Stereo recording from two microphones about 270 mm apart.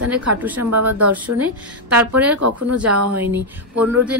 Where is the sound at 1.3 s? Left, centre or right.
Right.